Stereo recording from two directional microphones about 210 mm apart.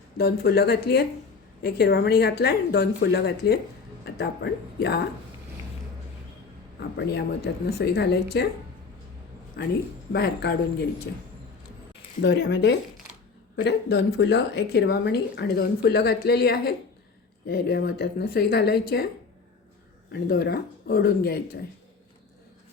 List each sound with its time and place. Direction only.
0.2 s speech: 50° left (ahead or behind)
6.7 s speech: 55° left (ahead or behind)
9.6 s speech: 50° left (ahead or behind)
12.2 s speech: 55° left (ahead or behind)
20.1 s speech: 50° left (ahead or behind)